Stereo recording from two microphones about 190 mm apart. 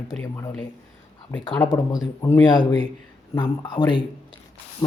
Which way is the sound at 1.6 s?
20° left (ahead or behind).